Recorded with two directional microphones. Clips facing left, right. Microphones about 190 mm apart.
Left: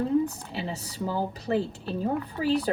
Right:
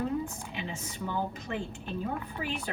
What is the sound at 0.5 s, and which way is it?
Speech, 35° left (ahead or behind).